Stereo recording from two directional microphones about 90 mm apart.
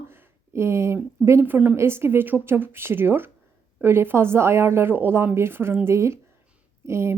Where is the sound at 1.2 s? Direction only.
30° right (ahead or behind).